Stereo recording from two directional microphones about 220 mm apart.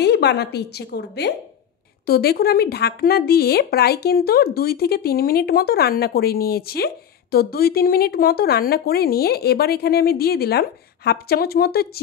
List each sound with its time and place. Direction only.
0.0 s speech: 50° left (ahead or behind)